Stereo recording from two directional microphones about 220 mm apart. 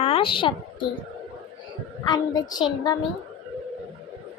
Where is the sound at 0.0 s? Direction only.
25° left (ahead or behind).